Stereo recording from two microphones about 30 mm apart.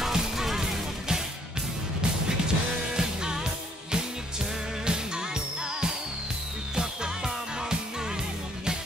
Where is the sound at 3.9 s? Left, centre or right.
Right.